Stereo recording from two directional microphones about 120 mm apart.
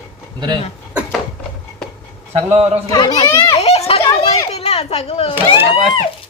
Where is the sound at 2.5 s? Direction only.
55° right (ahead or behind).